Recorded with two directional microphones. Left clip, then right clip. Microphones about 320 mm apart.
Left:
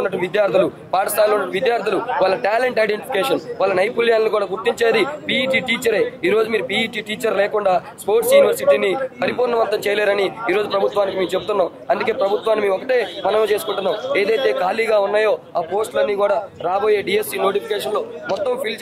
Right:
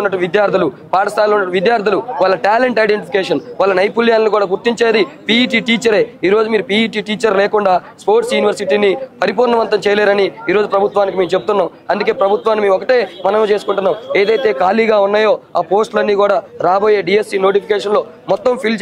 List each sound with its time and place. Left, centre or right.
0.0 s a man's voice: right